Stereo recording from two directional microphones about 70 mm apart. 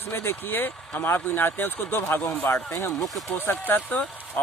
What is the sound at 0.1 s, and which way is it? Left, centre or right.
Speech, left.